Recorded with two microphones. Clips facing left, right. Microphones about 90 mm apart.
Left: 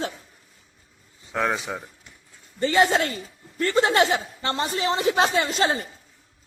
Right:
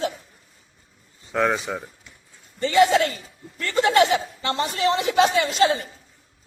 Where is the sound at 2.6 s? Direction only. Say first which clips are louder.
Right 3 dB; 35° left (ahead or behind).